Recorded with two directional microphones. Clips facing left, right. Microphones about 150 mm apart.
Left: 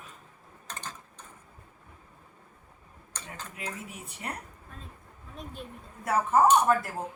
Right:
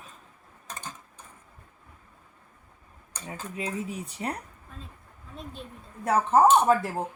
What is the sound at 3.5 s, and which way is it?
Speech, 35° right (ahead or behind).